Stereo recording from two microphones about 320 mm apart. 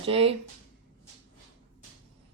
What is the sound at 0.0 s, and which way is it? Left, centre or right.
Speech, centre.